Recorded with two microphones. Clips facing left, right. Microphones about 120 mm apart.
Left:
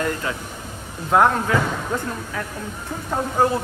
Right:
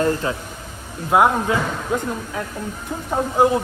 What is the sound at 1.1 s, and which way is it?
Speech, 10° right (ahead or behind).